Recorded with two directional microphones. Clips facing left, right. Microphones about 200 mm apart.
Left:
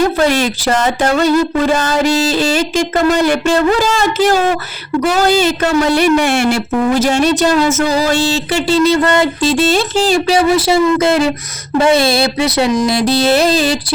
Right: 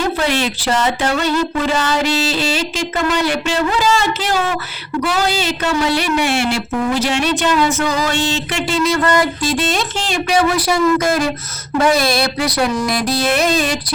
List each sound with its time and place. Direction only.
0.2 s speech: 45° left (ahead or behind)